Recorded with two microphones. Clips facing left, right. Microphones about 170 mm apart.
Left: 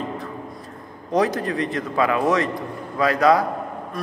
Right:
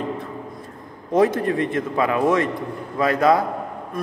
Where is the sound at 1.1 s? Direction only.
25° right (ahead or behind).